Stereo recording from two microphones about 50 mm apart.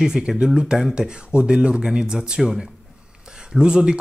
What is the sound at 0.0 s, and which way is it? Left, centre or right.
Speech, centre.